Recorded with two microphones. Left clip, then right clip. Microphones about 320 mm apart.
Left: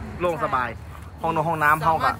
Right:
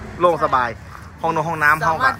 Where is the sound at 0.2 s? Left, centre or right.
Centre.